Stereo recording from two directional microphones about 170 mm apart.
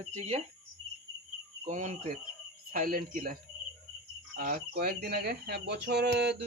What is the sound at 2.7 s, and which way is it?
Speech, 55° right (ahead or behind).